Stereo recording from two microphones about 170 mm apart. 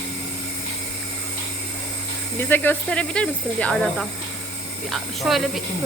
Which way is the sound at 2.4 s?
10° left (ahead or behind).